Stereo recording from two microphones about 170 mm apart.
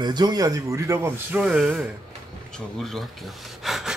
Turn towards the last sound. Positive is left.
turn(degrees=0)  # may be behind; listen again after turning